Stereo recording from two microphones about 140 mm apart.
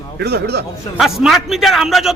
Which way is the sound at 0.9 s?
5° right (ahead or behind).